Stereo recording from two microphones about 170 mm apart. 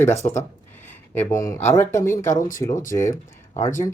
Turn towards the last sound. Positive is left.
turn(degrees=15)  # may be behind; listen again after turning